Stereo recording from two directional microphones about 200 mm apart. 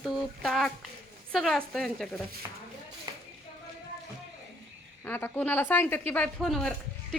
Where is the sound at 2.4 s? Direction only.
15° right (ahead or behind).